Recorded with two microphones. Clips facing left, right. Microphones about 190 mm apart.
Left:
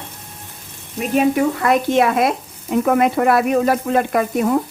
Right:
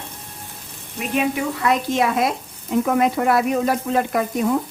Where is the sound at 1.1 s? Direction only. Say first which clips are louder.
Left 6 dB; 45° left (ahead or behind).